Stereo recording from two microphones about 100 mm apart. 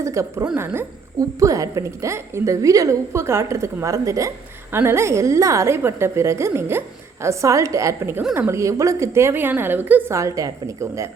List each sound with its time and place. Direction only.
0.0 s a woman's voice: 30° right (ahead or behind)
10.2 s a woman's voice: 35° right (ahead or behind)